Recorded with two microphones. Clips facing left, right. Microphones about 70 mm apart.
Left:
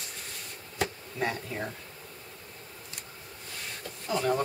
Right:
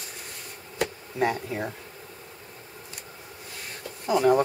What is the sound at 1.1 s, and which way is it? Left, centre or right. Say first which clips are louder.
Speech: right 6 dB; centre.